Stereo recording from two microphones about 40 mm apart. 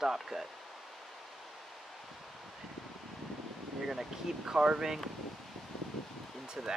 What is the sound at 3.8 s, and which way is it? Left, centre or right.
Speech, centre.